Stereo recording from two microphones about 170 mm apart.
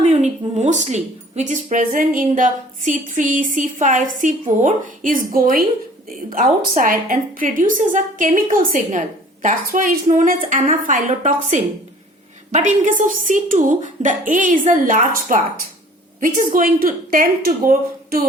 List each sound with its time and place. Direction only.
0.0 s a woman's voice: 40° right (ahead or behind); by 18.2 s 55° right (ahead or behind)